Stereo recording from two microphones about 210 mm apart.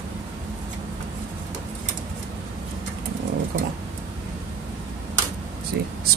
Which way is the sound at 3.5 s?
55° right (ahead or behind).